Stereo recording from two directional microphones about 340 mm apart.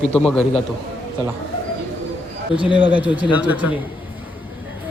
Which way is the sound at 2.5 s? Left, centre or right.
Centre.